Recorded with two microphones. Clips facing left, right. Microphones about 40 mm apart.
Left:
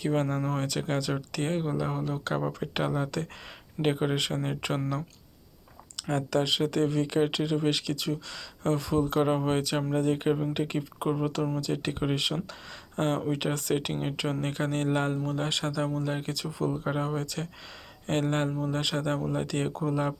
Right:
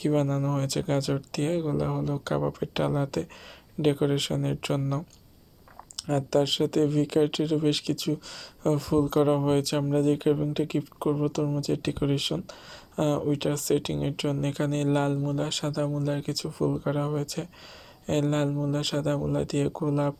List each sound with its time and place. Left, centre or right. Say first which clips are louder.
0.0 s speech: right 3 dB; centre
0.7 s speech: right 3 dB; centre
2.0 s speech: right 2 dB; left
2.2 s speech: right 2 dB; centre
4.3 s speech: right 3 dB; left
6.0 s speech: right 3 dB; centre
18.0 s speech: right 2 dB; left
18.5 s speech: right 2 dB; left
18.8 s speech: right 2 dB; centre